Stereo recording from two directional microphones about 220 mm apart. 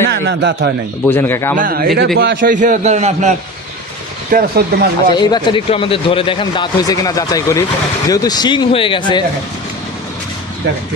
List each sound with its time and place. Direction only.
0.1 s a man's voice: 50° right (ahead or behind)
1.0 s speech: 10° left (ahead or behind)
1.6 s a man's voice: 40° right (ahead or behind)
4.3 s speech: 45° right (ahead or behind)
5.1 s speech: 20° left (ahead or behind)